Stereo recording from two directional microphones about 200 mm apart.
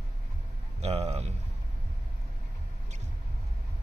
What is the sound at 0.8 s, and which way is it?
Speech, 30° right (ahead or behind).